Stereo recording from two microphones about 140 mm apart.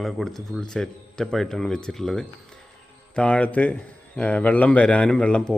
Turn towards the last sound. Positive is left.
turn(degrees=5)  # may be behind; listen again after turning